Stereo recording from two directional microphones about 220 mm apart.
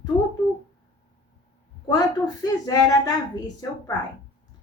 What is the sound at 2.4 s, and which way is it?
Speech, 15° left (ahead or behind).